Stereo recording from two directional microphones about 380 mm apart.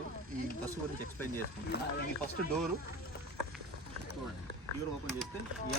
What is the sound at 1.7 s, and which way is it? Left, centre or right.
Speech, left.